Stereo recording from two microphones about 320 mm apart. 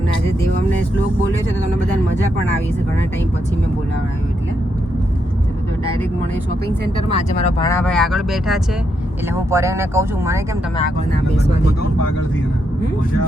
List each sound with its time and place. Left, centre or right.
6.9 s speech: left
7.7 s speech: centre